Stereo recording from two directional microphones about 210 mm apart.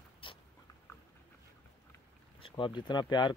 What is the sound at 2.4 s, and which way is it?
Speech, 25° left (ahead or behind).